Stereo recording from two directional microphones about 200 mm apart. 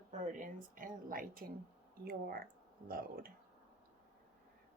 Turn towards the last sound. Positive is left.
turn(degrees=-45)  # may be behind; listen again after turning